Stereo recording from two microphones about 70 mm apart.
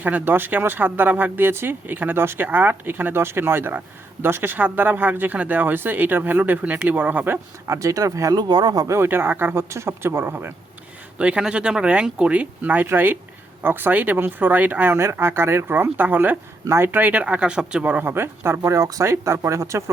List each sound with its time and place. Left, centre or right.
0.0 s speech: right
7.8 s speech: right
9.0 s speech: right
11.2 s speech: centre
14.9 s speech: right
16.6 s speech: right; by 17.9 s centre
17.9 s speech: right